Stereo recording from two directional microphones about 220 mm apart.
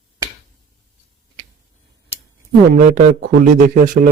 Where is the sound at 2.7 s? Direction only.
35° right (ahead or behind).